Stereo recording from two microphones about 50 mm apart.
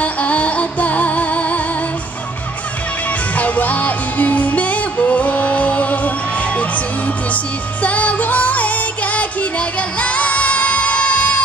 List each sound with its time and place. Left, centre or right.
0.0 s music: left
3.3 s music: left
7.8 s music: left